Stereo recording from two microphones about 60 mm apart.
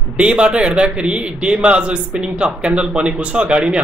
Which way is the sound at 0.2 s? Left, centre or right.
Centre.